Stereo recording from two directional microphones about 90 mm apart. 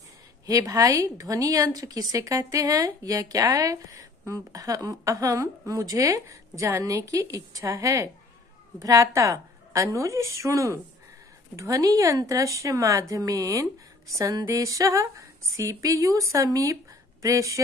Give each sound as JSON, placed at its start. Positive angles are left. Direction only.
{"t": 0.5, "sound": "a woman's voice", "side_deg": -40}